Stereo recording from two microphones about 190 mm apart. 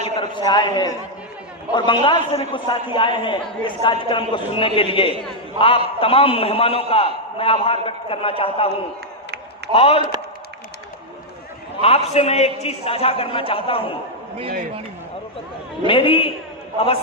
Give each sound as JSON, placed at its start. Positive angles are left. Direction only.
{"t": 0.2, "sound": "a man's voice", "side_deg": 25}
{"t": 9.7, "sound": "a man's voice", "side_deg": 30}
{"t": 11.8, "sound": "a man's voice", "side_deg": 35}
{"t": 15.9, "sound": "a man's voice", "side_deg": 25}